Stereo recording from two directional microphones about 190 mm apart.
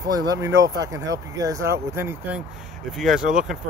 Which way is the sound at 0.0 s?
20° right (ahead or behind).